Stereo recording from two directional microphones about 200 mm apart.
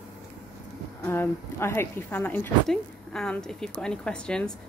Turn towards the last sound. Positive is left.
turn(degrees=5)  # may be behind; listen again after turning